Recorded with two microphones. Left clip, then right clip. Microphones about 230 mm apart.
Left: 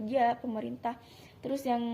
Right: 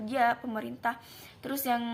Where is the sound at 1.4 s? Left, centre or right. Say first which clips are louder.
Left 1 dB; right.